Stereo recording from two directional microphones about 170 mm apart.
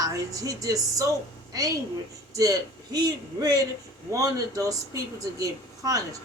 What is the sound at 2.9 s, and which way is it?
A woman's voice, 25° right (ahead or behind).